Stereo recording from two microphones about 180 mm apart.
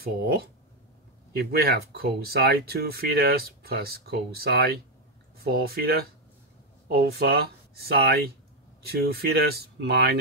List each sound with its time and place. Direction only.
0.0 s speech: 60° right (ahead or behind)